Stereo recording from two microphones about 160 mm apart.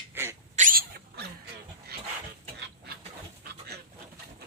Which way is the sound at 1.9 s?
70° right (ahead or behind).